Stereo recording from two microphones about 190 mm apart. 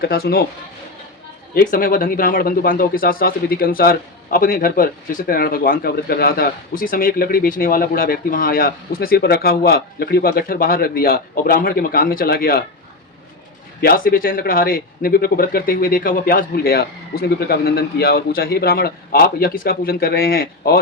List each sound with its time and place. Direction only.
0.0 s speech: 55° left (ahead or behind)
1.5 s speech: 45° left (ahead or behind)
13.8 s speech: 50° left (ahead or behind)